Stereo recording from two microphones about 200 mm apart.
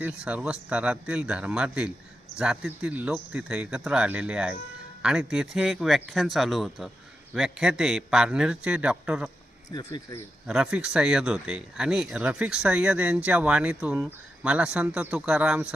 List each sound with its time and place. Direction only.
0.0 s speech: 5° right (ahead or behind)
9.6 s speech: 20° left (ahead or behind)
10.4 s speech: 5° right (ahead or behind)